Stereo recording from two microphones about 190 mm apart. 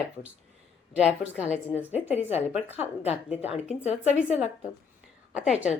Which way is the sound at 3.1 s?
35° left (ahead or behind).